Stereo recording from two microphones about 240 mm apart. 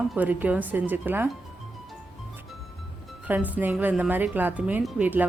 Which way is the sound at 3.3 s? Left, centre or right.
Centre.